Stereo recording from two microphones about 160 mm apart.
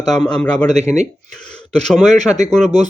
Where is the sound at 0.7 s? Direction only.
45° right (ahead or behind).